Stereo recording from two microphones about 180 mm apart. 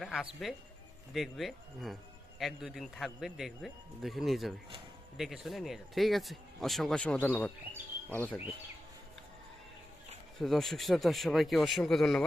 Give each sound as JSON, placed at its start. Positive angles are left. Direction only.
{"t": 0.0, "sound": "speech", "side_deg": 0}
{"t": 10.3, "sound": "speech", "side_deg": 0}